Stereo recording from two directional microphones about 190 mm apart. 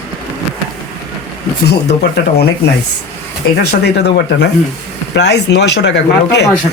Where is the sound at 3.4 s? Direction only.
60° left (ahead or behind).